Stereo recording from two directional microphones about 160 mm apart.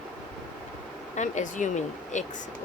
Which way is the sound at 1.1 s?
50° left (ahead or behind).